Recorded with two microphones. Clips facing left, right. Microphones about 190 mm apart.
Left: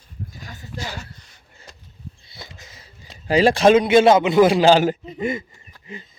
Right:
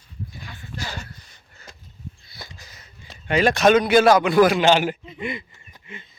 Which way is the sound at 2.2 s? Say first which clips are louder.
Left 1 dB; 25° left (ahead or behind).